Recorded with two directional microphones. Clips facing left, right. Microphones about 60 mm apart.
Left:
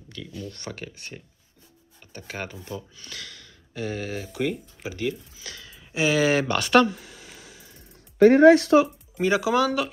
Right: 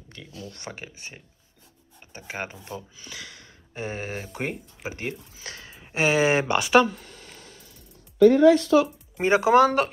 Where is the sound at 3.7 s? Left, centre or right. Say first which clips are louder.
Left 2 dB; right.